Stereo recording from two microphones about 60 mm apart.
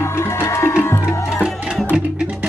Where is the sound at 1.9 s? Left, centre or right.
Centre.